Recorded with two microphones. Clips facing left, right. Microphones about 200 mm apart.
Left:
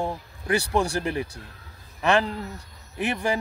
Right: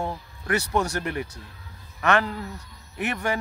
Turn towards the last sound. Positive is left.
turn(degrees=30)  # may be behind; listen again after turning